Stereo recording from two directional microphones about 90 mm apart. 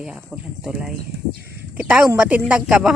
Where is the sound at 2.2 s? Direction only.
10° right (ahead or behind).